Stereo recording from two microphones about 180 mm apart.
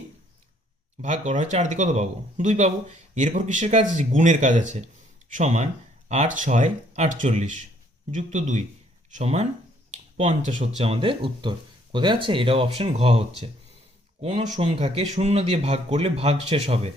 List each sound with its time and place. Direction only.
1.0 s speech: 40° right (ahead or behind)